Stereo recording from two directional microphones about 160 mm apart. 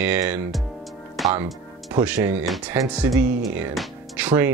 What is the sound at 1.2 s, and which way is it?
Music, centre (ahead or behind).